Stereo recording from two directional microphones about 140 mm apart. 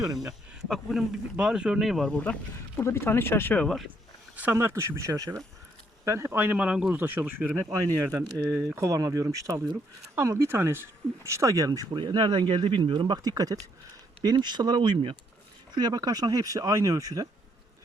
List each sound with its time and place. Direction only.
0.2 s speech: centre (ahead or behind)
4.4 s speech: 15° right (ahead or behind)